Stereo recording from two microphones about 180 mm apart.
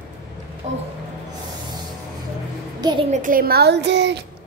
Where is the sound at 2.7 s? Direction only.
25° right (ahead or behind).